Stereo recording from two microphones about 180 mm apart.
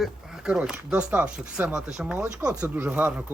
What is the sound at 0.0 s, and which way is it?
Speech, 5° right (ahead or behind).